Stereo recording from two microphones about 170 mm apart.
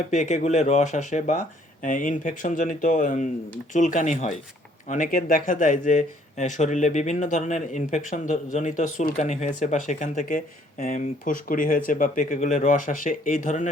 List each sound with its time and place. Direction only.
0.1 s speech: 45° left (ahead or behind)